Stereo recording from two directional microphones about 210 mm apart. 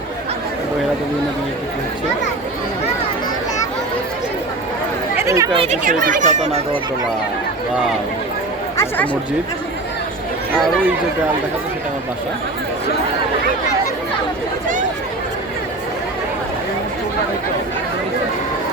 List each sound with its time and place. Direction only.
5.2 s chatter: 15° right (ahead or behind)
5.5 s speech: 30° right (ahead or behind)